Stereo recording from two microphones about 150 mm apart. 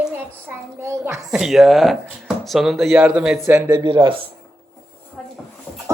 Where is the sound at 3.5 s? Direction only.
20° right (ahead or behind).